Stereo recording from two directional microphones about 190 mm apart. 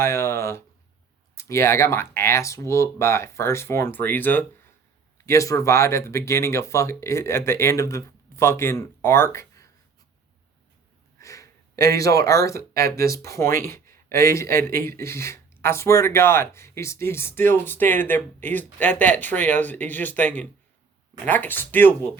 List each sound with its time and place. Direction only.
0.0 s speech: 15° left (ahead or behind)
11.2 s speech: 15° left (ahead or behind)